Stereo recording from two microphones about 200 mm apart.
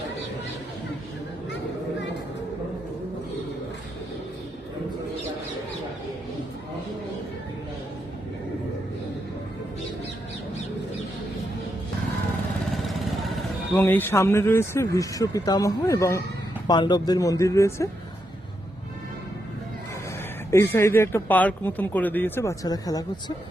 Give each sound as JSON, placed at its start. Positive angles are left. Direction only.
{"t": 12.7, "sound": "vehicle", "side_deg": 0}
{"t": 13.8, "sound": "speech", "side_deg": 10}
{"t": 20.5, "sound": "speech", "side_deg": 15}